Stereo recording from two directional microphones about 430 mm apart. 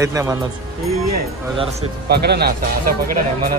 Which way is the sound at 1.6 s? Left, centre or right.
Centre.